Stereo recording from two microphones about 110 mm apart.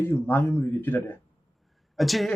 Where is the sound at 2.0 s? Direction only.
Centre (ahead or behind).